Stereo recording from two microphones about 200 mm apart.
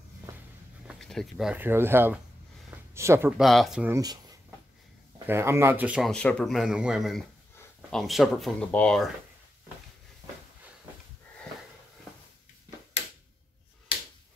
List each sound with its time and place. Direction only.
0.8 s speech: centre (ahead or behind)
3.9 s speech: 20° right (ahead or behind); by 9.1 s 5° left (ahead or behind)